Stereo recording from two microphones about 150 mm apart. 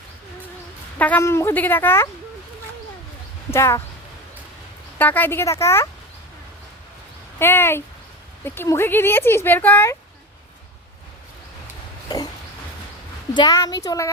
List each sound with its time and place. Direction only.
0.9 s speech: 10° left (ahead or behind)
3.5 s speech: 20° left (ahead or behind)
4.9 s speech: 10° left (ahead or behind)
7.3 s speech: 15° left (ahead or behind)
12.0 s a sound: 25° left (ahead or behind)
13.3 s speech: 25° left (ahead or behind)